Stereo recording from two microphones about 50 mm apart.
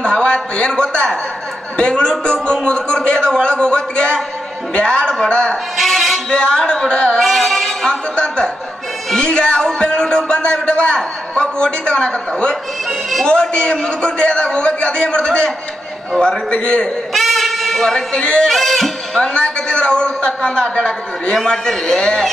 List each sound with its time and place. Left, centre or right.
0.0 s a man's voice: centre
5.8 s music: centre
6.3 s a man's voice: centre
7.2 s music: centre
7.8 s a man's voice: centre
17.1 s a sound: centre
18.1 s a man's voice: centre
18.5 s speech: centre
19.2 s a man's voice: centre